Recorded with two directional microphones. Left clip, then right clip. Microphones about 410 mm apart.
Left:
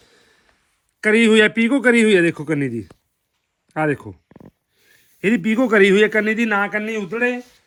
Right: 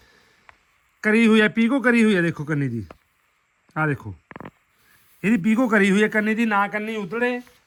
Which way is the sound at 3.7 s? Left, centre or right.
Centre.